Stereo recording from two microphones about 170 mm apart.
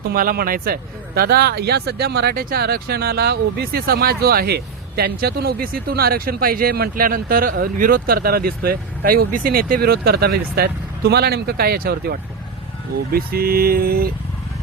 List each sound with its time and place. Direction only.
0.1 s speech: 60° right (ahead or behind)